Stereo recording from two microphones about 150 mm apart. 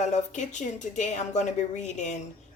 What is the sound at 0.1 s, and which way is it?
A woman's voice, 55° left (ahead or behind).